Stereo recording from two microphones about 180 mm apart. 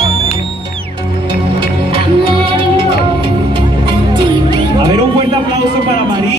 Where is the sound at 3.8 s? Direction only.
25° right (ahead or behind).